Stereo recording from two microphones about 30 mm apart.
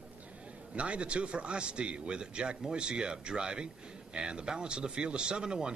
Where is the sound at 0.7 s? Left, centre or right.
Right.